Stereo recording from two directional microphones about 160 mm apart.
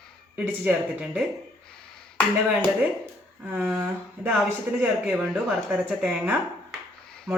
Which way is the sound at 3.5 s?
10° right (ahead or behind).